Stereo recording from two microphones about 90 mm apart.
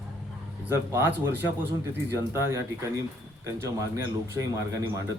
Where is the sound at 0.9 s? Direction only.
25° right (ahead or behind).